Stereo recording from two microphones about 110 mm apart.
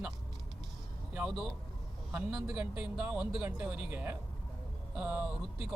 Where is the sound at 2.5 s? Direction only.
10° right (ahead or behind).